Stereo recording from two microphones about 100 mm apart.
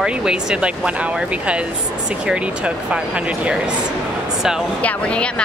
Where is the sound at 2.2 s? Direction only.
10° right (ahead or behind).